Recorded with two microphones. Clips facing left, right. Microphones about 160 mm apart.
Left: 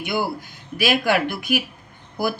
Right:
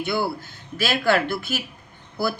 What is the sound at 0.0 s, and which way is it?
Speech, 15° left (ahead or behind).